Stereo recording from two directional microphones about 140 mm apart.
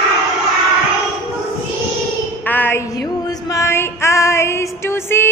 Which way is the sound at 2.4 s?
15° left (ahead or behind).